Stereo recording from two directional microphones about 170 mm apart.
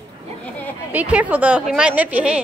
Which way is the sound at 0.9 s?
10° right (ahead or behind).